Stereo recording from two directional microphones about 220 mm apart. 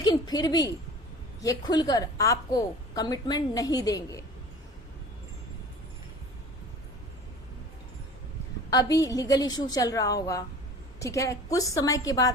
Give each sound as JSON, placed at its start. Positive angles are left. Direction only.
{"t": 0.0, "sound": "a sound", "side_deg": 20}
{"t": 1.4, "sound": "a woman's voice", "side_deg": 15}
{"t": 8.7, "sound": "a woman's voice", "side_deg": 15}